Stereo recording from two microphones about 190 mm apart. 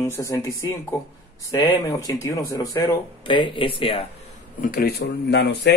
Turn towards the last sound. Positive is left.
turn(degrees=65)  # may be behind; listen again after turning